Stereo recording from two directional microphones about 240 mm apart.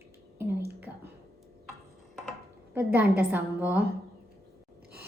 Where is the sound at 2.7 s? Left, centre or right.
Centre.